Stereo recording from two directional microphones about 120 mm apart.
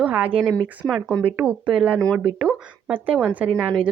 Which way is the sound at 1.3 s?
10° right (ahead or behind).